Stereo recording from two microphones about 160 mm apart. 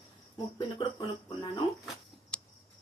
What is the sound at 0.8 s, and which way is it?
Speech, 30° left (ahead or behind).